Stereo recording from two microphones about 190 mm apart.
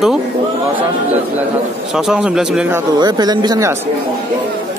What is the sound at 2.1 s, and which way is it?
Speech, 5° right (ahead or behind).